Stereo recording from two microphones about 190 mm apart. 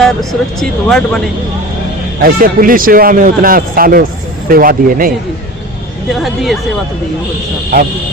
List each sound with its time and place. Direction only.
0.0 s speech: centre (ahead or behind)
2.2 s speech: 50° right (ahead or behind)
6.1 s speech: centre (ahead or behind)